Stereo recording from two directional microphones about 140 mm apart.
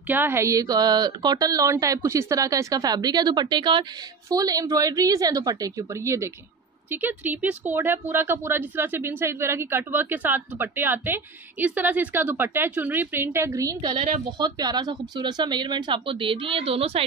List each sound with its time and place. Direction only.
0.0 s speech: 15° right (ahead or behind); by 17.0 s 45° right (ahead or behind)